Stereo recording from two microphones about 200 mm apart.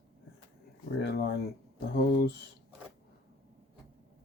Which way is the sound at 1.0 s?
55° left (ahead or behind).